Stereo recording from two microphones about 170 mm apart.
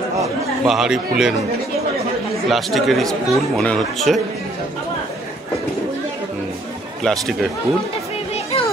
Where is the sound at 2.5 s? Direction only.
Centre (ahead or behind).